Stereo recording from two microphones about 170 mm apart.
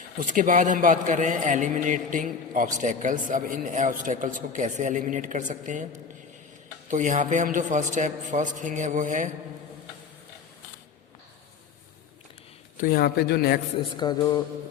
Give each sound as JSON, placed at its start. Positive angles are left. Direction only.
{"t": 0.2, "sound": "a man's voice", "side_deg": -50}
{"t": 6.8, "sound": "a man's voice", "side_deg": -45}
{"t": 12.7, "sound": "speech", "side_deg": 55}
{"t": 13.9, "sound": "a sound", "side_deg": 25}